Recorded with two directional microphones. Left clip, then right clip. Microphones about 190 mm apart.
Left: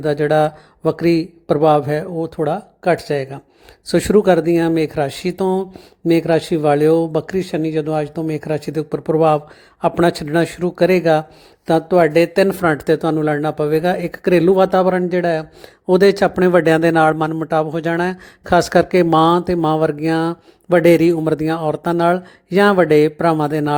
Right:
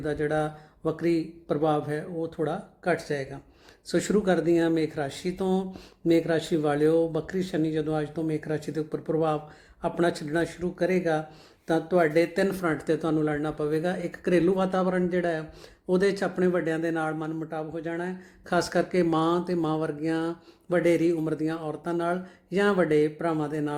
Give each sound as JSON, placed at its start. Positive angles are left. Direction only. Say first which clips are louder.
{"t": 0.0, "sound": "a man's voice", "louder": "left 12 dB", "side_deg": 40}